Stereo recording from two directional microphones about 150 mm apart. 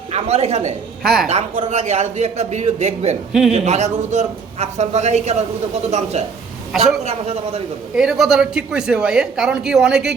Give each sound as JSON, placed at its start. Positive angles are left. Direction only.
{"t": 0.1, "sound": "a man's voice", "side_deg": -45}
{"t": 1.0, "sound": "speech", "side_deg": 0}
{"t": 1.3, "sound": "a man's voice", "side_deg": -45}
{"t": 7.9, "sound": "speech", "side_deg": -5}